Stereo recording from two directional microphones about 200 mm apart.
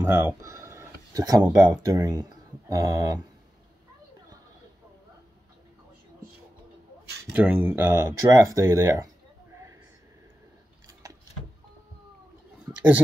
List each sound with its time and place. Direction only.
0.0 s speech: 10° right (ahead or behind)
7.3 s speech: 10° right (ahead or behind)
10.9 s a sound: 15° right (ahead or behind)